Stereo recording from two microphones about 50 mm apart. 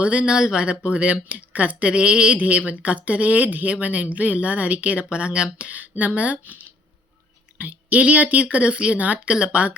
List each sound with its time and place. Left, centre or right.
0.0 s speech: right